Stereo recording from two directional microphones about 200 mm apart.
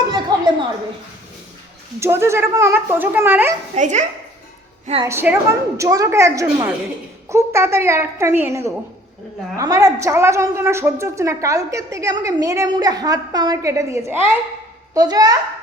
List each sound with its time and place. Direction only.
0.1 s a sound: 20° right (ahead or behind)
2.0 s a woman's voice: 15° right (ahead or behind)
3.8 s speech: 40° right (ahead or behind)
5.0 s a woman's voice: 10° right (ahead or behind)